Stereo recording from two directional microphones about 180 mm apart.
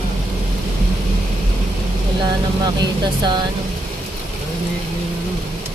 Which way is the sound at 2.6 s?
25° right (ahead or behind).